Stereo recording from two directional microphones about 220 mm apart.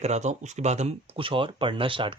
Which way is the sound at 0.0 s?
30° right (ahead or behind).